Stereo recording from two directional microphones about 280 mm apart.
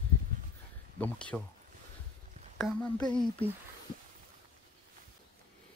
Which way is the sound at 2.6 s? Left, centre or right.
Centre.